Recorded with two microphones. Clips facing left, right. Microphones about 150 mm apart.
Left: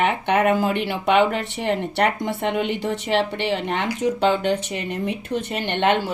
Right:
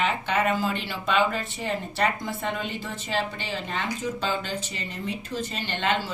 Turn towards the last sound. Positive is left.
turn(degrees=65)  # may be behind; listen again after turning